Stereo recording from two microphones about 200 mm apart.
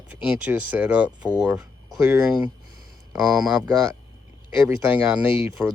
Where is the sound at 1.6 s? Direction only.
15° right (ahead or behind).